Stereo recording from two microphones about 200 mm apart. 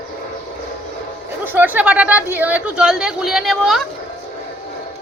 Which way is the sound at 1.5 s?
10° right (ahead or behind).